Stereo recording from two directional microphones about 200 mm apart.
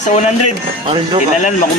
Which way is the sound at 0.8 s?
30° right (ahead or behind).